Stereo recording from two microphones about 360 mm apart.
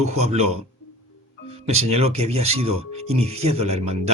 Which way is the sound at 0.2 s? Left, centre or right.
Centre.